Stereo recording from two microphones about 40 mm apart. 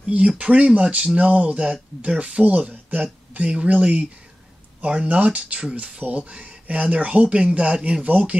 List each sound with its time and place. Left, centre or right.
0.4 s speech: right
2.9 s speech: right
3.4 s speech: right